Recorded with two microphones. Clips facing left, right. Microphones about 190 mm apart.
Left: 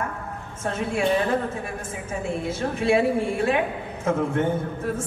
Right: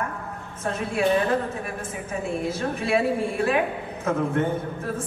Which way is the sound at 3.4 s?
30° left (ahead or behind).